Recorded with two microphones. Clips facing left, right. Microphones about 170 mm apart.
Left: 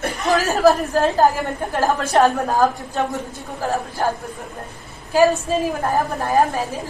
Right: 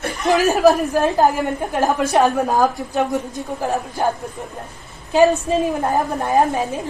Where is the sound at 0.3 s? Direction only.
15° right (ahead or behind).